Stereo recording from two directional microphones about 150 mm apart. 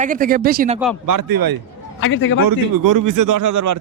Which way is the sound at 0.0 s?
65° right (ahead or behind).